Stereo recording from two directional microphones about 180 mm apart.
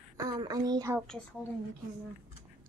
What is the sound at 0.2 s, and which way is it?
Speech, 20° right (ahead or behind).